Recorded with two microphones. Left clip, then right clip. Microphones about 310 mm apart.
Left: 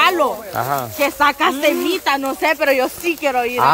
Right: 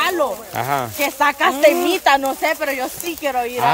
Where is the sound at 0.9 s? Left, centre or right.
Centre.